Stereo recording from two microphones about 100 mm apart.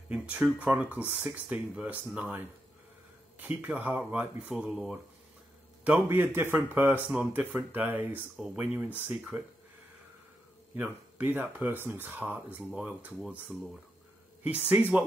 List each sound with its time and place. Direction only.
0.1 s speech: 15° right (ahead or behind)
6.0 s speech: 20° right (ahead or behind)
10.7 s speech: 20° right (ahead or behind)
14.4 s speech: 15° right (ahead or behind)